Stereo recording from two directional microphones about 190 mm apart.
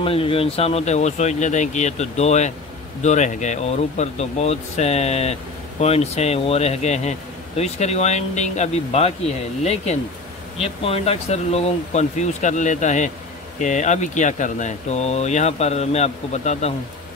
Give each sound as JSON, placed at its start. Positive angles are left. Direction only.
{"t": 0.0, "sound": "speech", "side_deg": 30}